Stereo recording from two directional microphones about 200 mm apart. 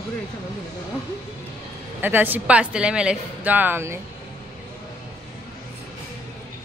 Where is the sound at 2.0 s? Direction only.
10° right (ahead or behind).